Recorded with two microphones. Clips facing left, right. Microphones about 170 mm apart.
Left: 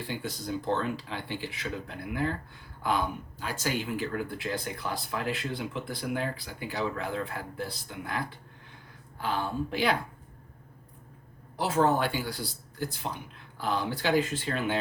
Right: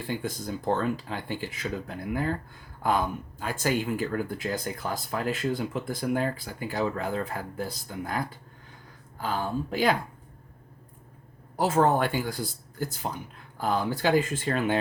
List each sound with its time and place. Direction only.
0.1 s speech: 50° right (ahead or behind)
2.8 s speech: 45° right (ahead or behind)
11.5 s speech: 45° right (ahead or behind)